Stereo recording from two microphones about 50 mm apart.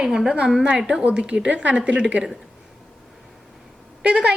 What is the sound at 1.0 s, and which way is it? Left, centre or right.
A woman's voice, right.